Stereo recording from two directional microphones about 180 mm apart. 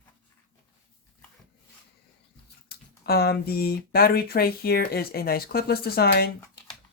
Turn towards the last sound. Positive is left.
turn(degrees=60)  # may be behind; listen again after turning